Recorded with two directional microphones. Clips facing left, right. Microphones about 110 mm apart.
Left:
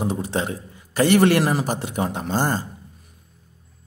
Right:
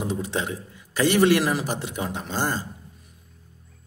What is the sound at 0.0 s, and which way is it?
A man's voice, 40° left (ahead or behind).